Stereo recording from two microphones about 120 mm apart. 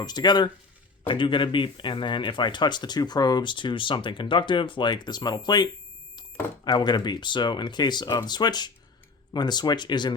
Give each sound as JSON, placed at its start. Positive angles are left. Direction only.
{"t": 0.0, "sound": "speech", "side_deg": 35}
{"t": 6.7, "sound": "speech", "side_deg": 35}